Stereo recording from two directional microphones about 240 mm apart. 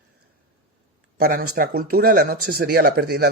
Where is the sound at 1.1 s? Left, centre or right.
Right.